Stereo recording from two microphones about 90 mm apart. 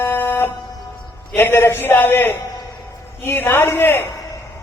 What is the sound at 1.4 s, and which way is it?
A man's voice, 25° left (ahead or behind).